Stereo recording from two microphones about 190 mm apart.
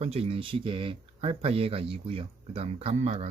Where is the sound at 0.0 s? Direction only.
30° right (ahead or behind).